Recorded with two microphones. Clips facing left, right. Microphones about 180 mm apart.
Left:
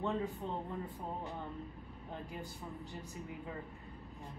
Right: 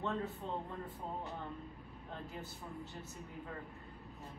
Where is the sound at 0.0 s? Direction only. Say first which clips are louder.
Left 2 dB; 15° left (ahead or behind).